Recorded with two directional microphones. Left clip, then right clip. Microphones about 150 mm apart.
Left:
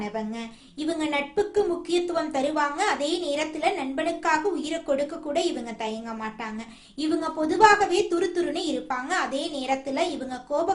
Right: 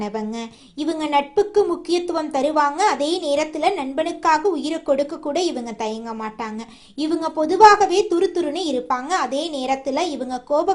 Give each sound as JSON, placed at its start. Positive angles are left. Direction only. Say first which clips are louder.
{"t": 0.0, "sound": "a woman's voice", "louder": "right 5 dB", "side_deg": -35}
{"t": 7.0, "sound": "a woman's voice", "louder": "right 5 dB", "side_deg": -30}